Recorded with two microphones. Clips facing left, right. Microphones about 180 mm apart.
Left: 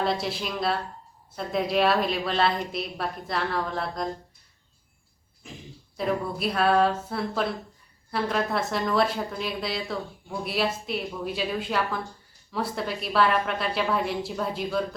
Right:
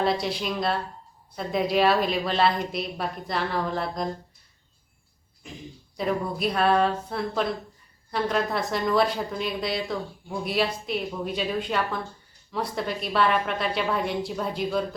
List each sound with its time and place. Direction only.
0.0 s a woman's voice: centre (ahead or behind)
6.1 s a woman's voice: centre (ahead or behind)